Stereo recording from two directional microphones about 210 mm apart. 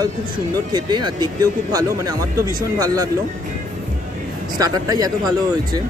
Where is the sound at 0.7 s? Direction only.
20° right (ahead or behind).